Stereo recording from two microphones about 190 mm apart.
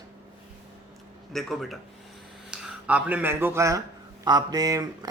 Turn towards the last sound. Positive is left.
turn(degrees=-20)  # may be behind; listen again after turning